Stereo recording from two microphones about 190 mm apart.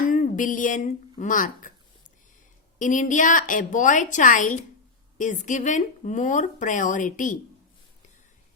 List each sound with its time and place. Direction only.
0.1 s a sound: 45° left (ahead or behind)
1.1 s a woman's voice: 40° left (ahead or behind)
2.7 s a woman's voice: 40° left (ahead or behind)